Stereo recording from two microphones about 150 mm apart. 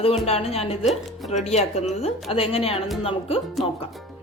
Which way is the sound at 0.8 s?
Centre (ahead or behind).